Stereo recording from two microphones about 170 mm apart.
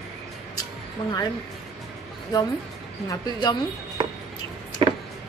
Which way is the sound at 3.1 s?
25° left (ahead or behind).